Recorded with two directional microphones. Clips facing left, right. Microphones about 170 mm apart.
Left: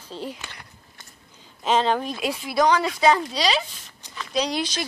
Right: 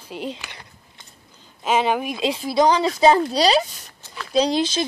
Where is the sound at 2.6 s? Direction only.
25° right (ahead or behind).